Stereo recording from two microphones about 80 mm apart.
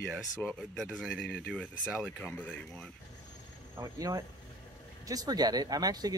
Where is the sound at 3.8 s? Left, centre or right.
Right.